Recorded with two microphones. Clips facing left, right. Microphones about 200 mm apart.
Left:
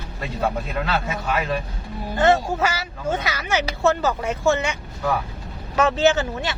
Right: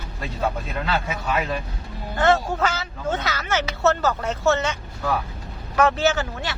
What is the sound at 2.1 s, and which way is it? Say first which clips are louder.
Speech: left 1 dB; 15° left (ahead or behind).